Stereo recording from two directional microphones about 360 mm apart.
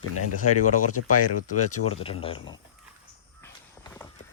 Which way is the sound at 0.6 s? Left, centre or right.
Left.